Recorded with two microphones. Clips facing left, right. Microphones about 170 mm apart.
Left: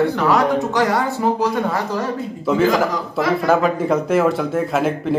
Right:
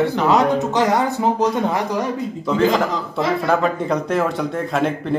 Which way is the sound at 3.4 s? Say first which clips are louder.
Left 4 dB; centre (ahead or behind).